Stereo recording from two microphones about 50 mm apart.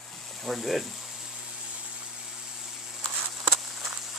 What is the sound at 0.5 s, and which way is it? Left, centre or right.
Speech, centre.